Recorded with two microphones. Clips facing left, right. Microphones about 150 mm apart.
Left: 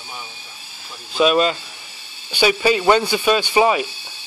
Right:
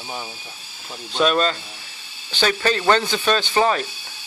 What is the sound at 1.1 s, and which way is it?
Speech, 5° left (ahead or behind).